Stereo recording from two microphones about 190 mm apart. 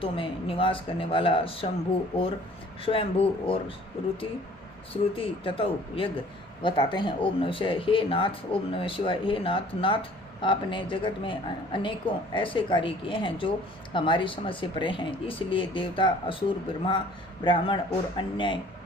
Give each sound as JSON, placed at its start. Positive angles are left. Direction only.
{"t": 0.0, "sound": "speech", "side_deg": 25}
{"t": 5.1, "sound": "speech", "side_deg": 30}